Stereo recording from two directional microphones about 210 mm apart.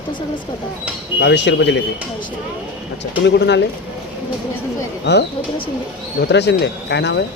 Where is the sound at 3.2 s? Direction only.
55° left (ahead or behind).